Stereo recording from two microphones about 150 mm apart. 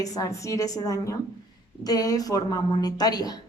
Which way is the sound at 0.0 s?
25° left (ahead or behind).